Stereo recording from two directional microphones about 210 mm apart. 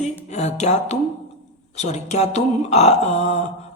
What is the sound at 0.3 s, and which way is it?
Speech, 30° left (ahead or behind).